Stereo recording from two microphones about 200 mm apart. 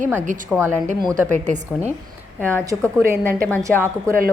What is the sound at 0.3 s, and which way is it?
Speech, 40° right (ahead or behind).